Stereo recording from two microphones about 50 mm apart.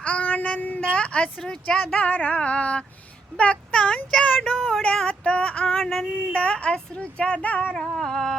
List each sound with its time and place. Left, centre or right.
0.0 s child singing: left
0.8 s a woman's voice: left
4.4 s child singing: centre
4.8 s speech: left
5.8 s child singing: centre
6.3 s speech: left
7.8 s cat: centre